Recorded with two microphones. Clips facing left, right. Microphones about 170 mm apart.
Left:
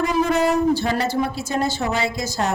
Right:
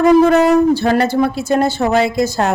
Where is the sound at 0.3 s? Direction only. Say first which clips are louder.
Right 7 dB; 65° right (ahead or behind).